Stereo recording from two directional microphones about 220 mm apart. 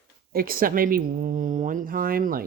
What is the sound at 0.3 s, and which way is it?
Speech, 40° right (ahead or behind).